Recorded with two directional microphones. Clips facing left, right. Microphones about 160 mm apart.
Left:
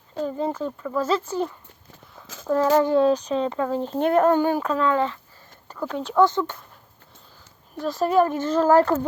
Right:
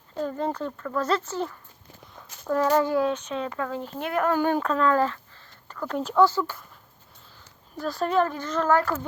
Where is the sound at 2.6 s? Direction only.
20° left (ahead or behind).